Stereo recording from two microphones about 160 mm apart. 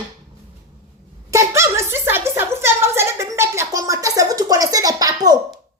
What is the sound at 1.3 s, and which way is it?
A child's voice, 20° right (ahead or behind).